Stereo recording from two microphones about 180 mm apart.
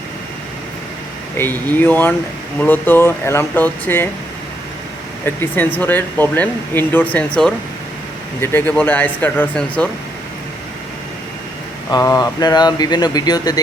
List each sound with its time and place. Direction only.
1.4 s speech: 15° left (ahead or behind)
5.2 s speech: 10° left (ahead or behind)
11.9 s speech: 20° left (ahead or behind)